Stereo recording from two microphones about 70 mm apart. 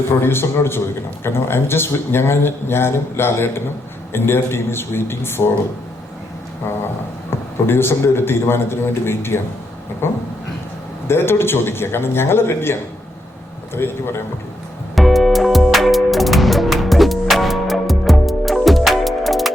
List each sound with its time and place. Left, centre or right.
0.2 s a man's voice: left
7.3 s a man's voice: left
14.9 s music: centre